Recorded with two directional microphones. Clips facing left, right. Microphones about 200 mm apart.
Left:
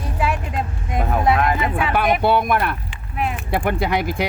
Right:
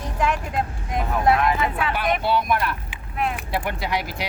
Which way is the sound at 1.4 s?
50° left (ahead or behind).